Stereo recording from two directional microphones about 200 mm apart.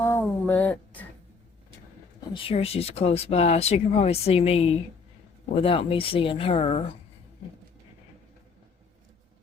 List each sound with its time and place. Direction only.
0.0 s speech: 10° left (ahead or behind)
2.3 s speech: 25° left (ahead or behind)